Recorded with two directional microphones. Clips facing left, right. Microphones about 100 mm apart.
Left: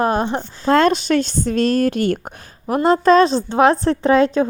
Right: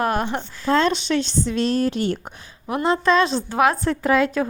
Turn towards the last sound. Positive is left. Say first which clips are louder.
# left 5 dB
turn(degrees=30)  # may be behind; listen again after turning